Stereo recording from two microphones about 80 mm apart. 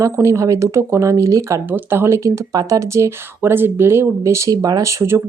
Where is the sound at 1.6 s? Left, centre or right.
Right.